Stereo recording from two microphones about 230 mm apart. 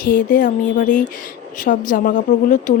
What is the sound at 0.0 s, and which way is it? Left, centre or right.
Speech, left.